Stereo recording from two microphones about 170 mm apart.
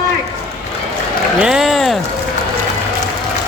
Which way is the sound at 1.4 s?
5° right (ahead or behind).